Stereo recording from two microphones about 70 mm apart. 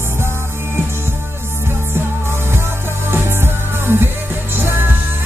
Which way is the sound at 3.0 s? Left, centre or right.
Right.